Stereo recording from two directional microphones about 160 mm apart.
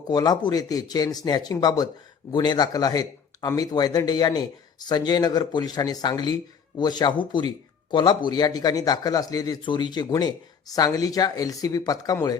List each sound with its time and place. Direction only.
0.1 s a man's voice: 25° left (ahead or behind)